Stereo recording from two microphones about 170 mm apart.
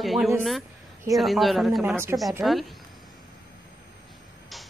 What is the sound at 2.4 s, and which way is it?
Speech, centre (ahead or behind).